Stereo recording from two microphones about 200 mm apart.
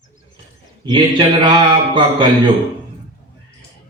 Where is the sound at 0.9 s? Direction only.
25° right (ahead or behind).